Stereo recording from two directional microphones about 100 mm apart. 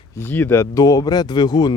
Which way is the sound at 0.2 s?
20° left (ahead or behind).